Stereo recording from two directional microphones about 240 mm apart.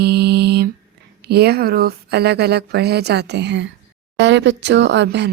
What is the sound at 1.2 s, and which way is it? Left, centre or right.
Speech, right.